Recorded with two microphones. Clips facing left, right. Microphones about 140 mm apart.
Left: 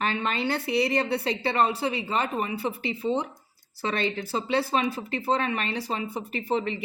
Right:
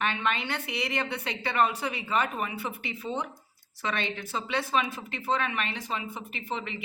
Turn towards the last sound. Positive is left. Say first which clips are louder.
# left 8 dB
turn(degrees=35)  # may be behind; listen again after turning